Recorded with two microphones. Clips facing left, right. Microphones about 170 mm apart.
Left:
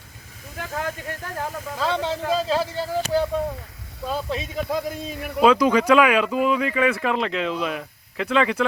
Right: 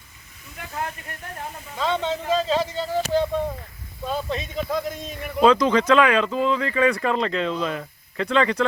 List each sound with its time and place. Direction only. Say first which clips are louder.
0.5 s speech: left 3 dB; 90° left
1.8 s speech: even; 5° left (ahead or behind)